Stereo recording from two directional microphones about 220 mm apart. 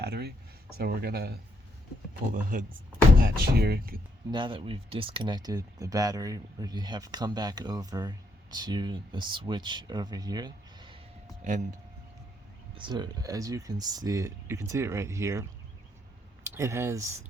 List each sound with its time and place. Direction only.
0.0 s speech: 50° right (ahead or behind)
4.3 s speech: 20° right (ahead or behind)
11.4 s speech: 35° right (ahead or behind)
12.7 s speech: 20° right (ahead or behind)